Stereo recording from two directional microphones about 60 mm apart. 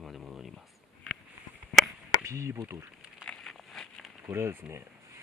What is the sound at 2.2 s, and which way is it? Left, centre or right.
Speech, right.